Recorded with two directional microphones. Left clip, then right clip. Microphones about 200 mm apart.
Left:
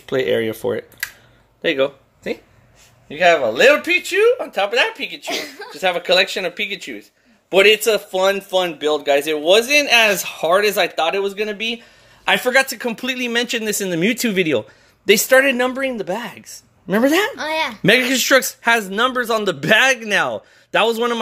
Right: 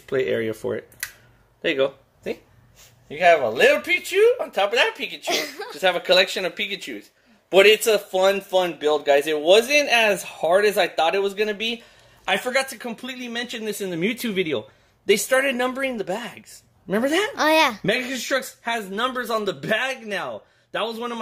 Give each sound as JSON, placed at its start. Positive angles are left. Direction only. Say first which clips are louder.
{"t": 0.0, "sound": "speech", "louder": "left 4 dB", "side_deg": 10}
{"t": 5.2, "sound": "speech", "louder": "even", "side_deg": -50}
{"t": 5.8, "sound": "speech", "louder": "left 2 dB", "side_deg": 10}
{"t": 12.3, "sound": "speech", "louder": "left 7 dB", "side_deg": 20}
{"t": 17.4, "sound": "speech", "louder": "right 4 dB", "side_deg": -50}
{"t": 17.8, "sound": "speech", "louder": "left 9 dB", "side_deg": 30}